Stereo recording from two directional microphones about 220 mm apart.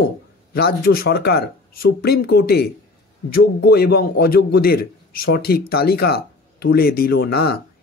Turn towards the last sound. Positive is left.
turn(degrees=45)  # may be behind; listen again after turning